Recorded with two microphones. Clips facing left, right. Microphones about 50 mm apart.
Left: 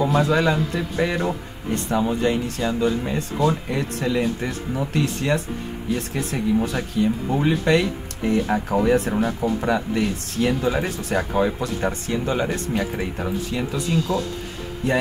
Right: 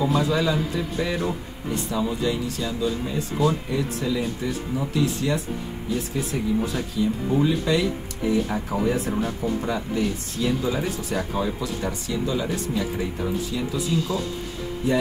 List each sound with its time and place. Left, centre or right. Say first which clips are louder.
0.0 s speech: left 3 dB; left